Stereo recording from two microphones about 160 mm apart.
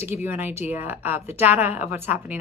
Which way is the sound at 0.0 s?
15° right (ahead or behind).